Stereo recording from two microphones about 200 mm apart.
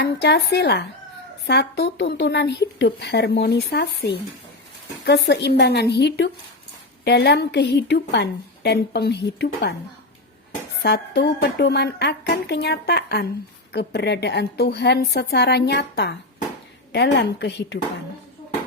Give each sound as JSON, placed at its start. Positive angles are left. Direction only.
{"t": 0.0, "sound": "a woman's voice", "side_deg": 55}
{"t": 10.8, "sound": "a woman's voice", "side_deg": 55}
{"t": 17.2, "sound": "a woman's voice", "side_deg": 60}